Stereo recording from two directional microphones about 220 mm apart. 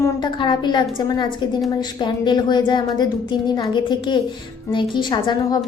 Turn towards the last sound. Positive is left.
turn(degrees=20)  # may be behind; listen again after turning